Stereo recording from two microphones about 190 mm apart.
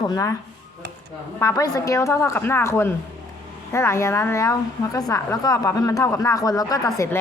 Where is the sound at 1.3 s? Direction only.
15° left (ahead or behind).